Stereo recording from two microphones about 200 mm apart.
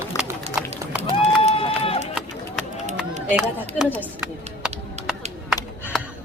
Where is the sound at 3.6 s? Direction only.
10° right (ahead or behind).